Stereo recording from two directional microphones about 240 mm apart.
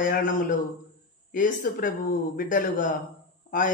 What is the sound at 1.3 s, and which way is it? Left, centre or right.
Speech, left.